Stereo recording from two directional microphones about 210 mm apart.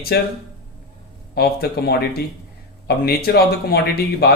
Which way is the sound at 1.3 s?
50° left (ahead or behind).